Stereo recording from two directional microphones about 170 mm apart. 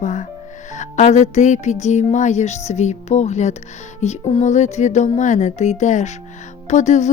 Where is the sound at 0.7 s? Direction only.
45° left (ahead or behind).